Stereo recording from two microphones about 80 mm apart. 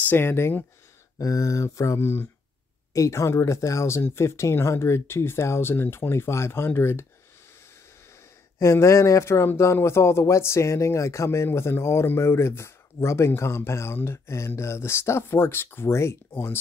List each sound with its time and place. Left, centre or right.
0.0 s speech: left
1.1 s speech: left
2.9 s speech: left
8.5 s speech: left